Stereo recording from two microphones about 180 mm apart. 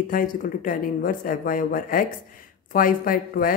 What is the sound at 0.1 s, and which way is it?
Speech, 50° left (ahead or behind).